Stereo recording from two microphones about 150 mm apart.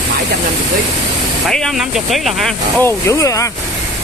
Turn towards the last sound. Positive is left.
turn(degrees=20)  # may be behind; listen again after turning